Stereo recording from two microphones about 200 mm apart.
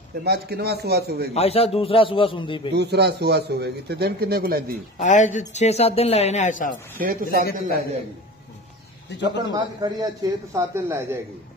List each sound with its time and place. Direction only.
0.2 s a man's voice: 55° right (ahead or behind)
1.3 s a man's voice: 30° left (ahead or behind)
2.7 s a man's voice: 55° right (ahead or behind)
4.9 s speech: 40° left (ahead or behind)
7.0 s a man's voice: 45° right (ahead or behind)
9.1 s speech: 60° left (ahead or behind)
9.5 s a man's voice: 20° right (ahead or behind)